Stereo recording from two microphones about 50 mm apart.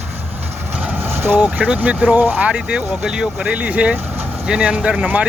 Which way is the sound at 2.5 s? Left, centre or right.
Centre.